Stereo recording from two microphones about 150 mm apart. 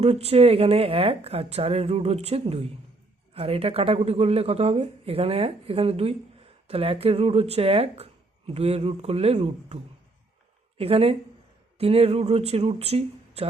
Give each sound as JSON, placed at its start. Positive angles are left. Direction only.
{"t": 0.0, "sound": "speech", "side_deg": -45}